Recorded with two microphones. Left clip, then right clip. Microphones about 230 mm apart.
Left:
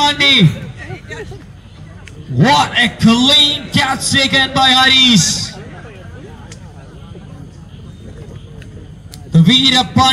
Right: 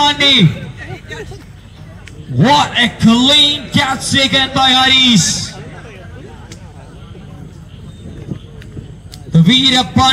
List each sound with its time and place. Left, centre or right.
0.0 s a man's voice: centre
0.7 s a sound: centre
2.3 s a man's voice: centre
9.3 s a man's voice: centre